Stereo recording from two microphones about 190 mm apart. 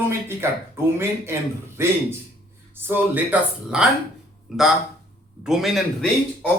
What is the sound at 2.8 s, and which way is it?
Speech, 10° right (ahead or behind).